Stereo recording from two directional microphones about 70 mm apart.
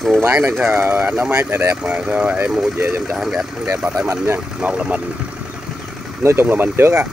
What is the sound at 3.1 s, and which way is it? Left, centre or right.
Speech, centre.